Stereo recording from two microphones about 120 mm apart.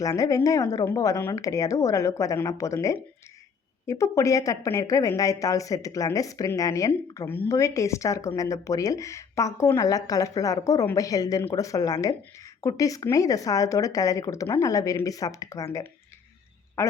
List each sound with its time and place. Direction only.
0.0 s speech: 30° left (ahead or behind)